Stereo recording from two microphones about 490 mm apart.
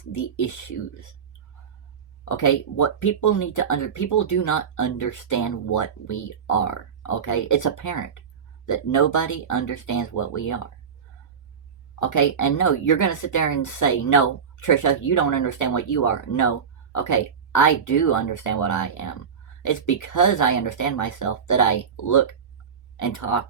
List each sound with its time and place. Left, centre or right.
0.2 s speech: left
2.3 s speech: left
11.9 s speech: left